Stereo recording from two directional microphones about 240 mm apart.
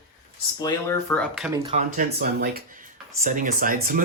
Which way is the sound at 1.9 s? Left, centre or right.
Right.